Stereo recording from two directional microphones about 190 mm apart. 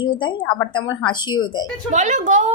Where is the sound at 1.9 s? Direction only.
40° right (ahead or behind).